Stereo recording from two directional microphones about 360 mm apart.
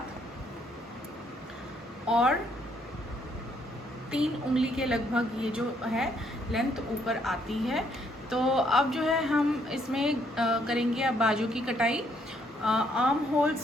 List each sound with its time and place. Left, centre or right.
2.0 s speech: centre
4.1 s a woman's voice: centre